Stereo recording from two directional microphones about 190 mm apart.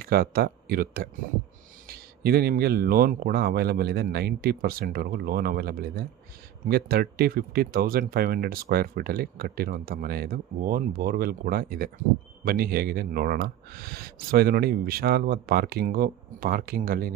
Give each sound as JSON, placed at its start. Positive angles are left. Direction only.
{"t": 0.0, "sound": "speech", "side_deg": -50}